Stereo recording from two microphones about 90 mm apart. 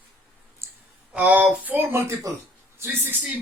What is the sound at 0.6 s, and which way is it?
Clicking, 30° right (ahead or behind).